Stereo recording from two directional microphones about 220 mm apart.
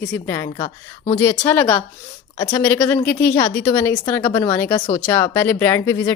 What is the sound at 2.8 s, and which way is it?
Speech, 5° left (ahead or behind).